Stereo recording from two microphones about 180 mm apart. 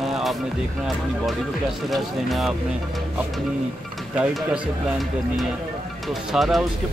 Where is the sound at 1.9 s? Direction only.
Centre (ahead or behind).